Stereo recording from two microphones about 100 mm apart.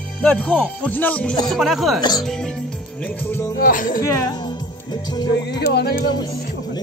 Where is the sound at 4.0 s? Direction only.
40° left (ahead or behind).